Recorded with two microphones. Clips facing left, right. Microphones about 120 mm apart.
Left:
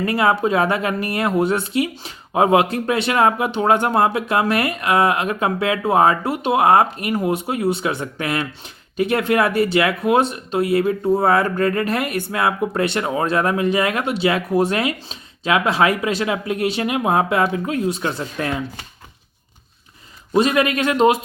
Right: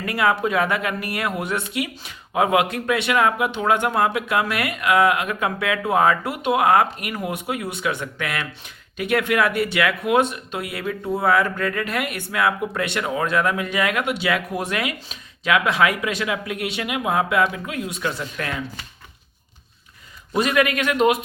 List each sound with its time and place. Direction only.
0.0 s speech: 30° left (ahead or behind)
20.3 s a man's voice: 25° left (ahead or behind)